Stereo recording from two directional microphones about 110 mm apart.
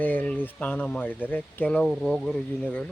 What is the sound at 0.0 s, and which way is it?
Speech, 15° left (ahead or behind).